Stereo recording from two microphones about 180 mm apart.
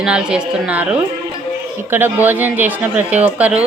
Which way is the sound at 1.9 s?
10° right (ahead or behind).